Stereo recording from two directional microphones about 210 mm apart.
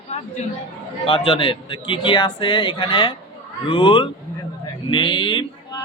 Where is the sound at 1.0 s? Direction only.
25° left (ahead or behind).